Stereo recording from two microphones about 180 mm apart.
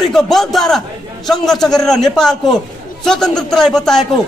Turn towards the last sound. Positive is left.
turn(degrees=5)  # may be behind; listen again after turning